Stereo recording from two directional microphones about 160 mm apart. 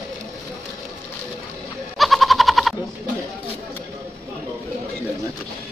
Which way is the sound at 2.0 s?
Centre (ahead or behind).